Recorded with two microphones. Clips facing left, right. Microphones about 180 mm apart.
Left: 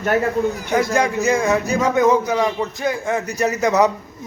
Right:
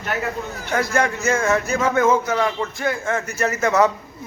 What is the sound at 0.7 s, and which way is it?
A man's voice, 15° left (ahead or behind).